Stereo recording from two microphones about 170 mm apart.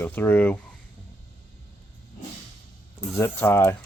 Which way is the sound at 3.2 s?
15° left (ahead or behind).